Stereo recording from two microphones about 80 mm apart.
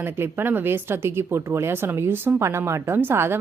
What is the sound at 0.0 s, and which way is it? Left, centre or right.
Speech, right.